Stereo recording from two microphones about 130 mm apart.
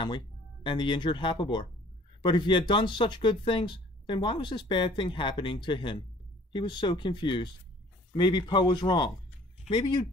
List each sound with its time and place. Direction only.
0.7 s speech: 35° left (ahead or behind)